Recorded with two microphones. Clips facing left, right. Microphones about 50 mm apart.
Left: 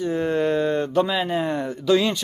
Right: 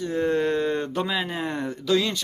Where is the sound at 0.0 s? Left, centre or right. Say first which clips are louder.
Left 1 dB; centre.